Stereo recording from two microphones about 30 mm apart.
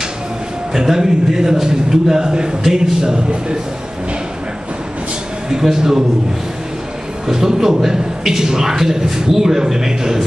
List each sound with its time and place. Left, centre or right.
0.7 s a man's voice: centre
5.5 s a man's voice: centre
7.2 s a man's voice: centre